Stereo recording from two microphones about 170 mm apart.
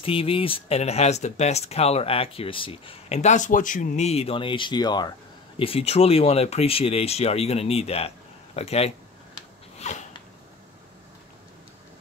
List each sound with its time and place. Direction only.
0.0 s speech: 35° left (ahead or behind)
5.6 s speech: 35° left (ahead or behind)
9.8 s a sound: 45° left (ahead or behind)